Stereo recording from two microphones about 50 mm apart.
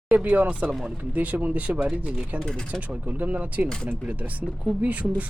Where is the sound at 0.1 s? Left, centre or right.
Right.